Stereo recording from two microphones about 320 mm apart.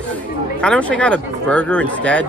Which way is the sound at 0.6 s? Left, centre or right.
Centre.